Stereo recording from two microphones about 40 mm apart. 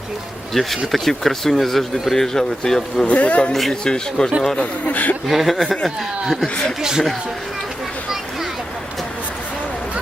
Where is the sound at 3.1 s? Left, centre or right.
Left.